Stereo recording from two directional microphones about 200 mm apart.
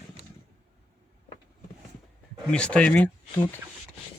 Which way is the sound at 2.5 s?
5° left (ahead or behind).